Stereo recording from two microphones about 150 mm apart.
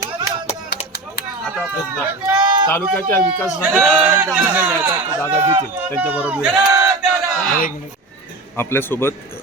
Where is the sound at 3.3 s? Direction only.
10° right (ahead or behind).